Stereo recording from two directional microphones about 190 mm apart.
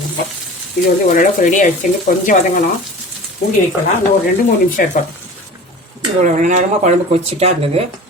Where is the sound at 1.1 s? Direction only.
40° left (ahead or behind).